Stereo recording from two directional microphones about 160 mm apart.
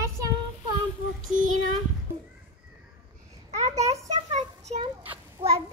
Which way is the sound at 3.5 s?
45° right (ahead or behind).